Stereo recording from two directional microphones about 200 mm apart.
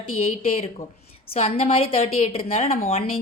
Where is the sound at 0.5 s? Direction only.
30° left (ahead or behind).